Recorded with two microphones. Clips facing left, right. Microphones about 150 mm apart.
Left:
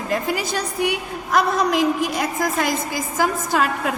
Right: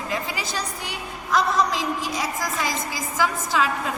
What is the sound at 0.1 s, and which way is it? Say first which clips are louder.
A woman's voice: left 8 dB; 50° left (ahead or behind).